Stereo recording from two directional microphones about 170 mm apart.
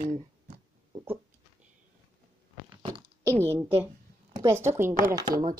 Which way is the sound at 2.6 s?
25° right (ahead or behind).